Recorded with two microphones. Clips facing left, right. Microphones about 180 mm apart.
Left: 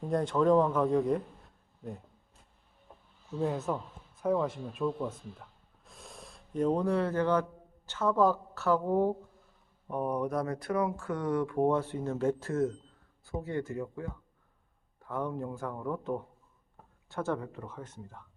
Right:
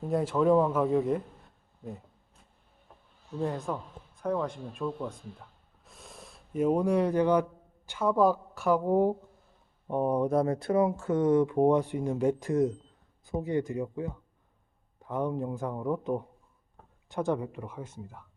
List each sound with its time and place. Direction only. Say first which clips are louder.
0.1 s a man's voice: right 1 dB; 5° right (ahead or behind)
3.4 s speech: left 1 dB; 5° left (ahead or behind)
5.8 s gasp: even; centre (ahead or behind)
7.9 s speech: right 2 dB; 10° right (ahead or behind)
9.9 s speech: right 5 dB; 25° right (ahead or behind); by 18.3 s 10° right (ahead or behind)